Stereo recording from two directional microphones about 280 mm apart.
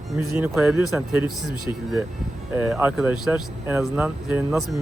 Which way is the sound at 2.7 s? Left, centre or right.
Centre.